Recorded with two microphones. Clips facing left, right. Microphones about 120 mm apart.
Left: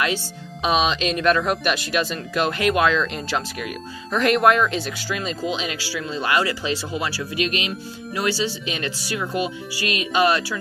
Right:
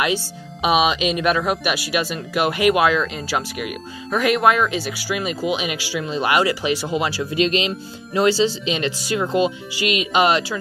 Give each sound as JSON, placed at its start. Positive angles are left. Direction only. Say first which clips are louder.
{"t": 0.0, "sound": "speech", "louder": "right 2 dB", "side_deg": -10}
{"t": 7.3, "sound": "speech", "louder": "right 6 dB", "side_deg": -30}